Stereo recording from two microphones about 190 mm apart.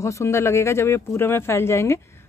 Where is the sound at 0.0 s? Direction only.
15° left (ahead or behind).